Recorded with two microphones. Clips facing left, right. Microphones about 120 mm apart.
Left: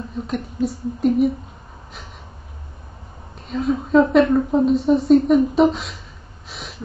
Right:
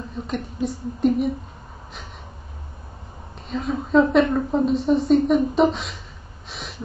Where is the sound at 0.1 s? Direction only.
Centre (ahead or behind).